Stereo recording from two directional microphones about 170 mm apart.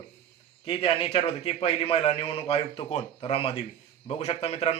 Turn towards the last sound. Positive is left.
turn(degrees=35)  # may be behind; listen again after turning